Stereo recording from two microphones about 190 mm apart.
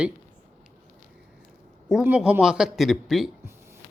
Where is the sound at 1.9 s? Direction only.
5° right (ahead or behind).